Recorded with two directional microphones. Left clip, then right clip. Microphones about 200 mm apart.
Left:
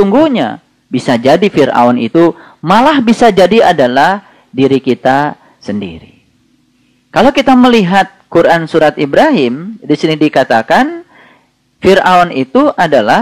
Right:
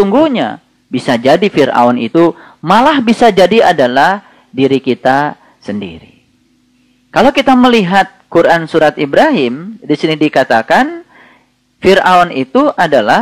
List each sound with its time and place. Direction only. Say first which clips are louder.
0.0 s speech: left 1 dB; 40° right (ahead or behind)
7.1 s speech: left 1 dB; 35° right (ahead or behind)